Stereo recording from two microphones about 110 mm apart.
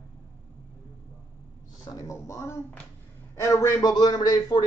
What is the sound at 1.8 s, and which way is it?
Speech, 30° left (ahead or behind).